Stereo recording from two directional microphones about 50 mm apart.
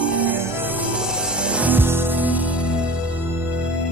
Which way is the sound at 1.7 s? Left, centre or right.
Right.